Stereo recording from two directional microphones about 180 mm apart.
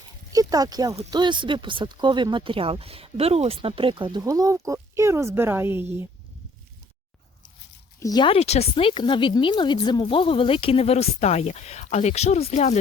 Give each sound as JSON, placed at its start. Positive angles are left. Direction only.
{"t": 0.3, "sound": "speech", "side_deg": -20}
{"t": 7.9, "sound": "speech", "side_deg": 20}